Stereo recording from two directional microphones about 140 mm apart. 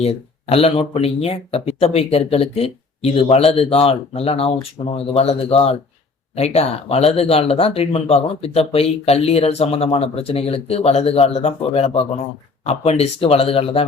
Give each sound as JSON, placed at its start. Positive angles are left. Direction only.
{"t": 0.0, "sound": "speech", "side_deg": 45}